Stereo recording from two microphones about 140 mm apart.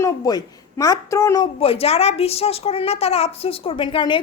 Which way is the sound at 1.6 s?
45° left (ahead or behind).